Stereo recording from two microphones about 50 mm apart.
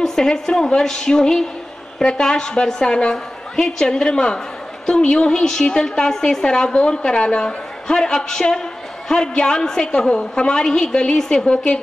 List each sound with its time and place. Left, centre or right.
0.0 s a woman's voice: centre